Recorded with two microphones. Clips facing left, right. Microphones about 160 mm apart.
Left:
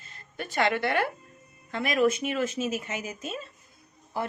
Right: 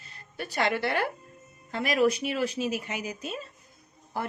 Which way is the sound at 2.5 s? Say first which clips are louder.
Even; 45° left (ahead or behind).